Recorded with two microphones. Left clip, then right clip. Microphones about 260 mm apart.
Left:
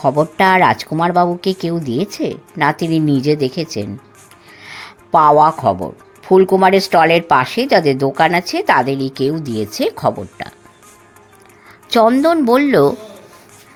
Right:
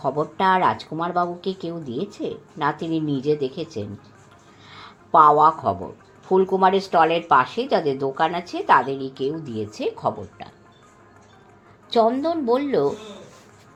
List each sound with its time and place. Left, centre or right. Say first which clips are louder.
0.0 s speech: left 8 dB; left
11.9 s speech: left 8 dB; left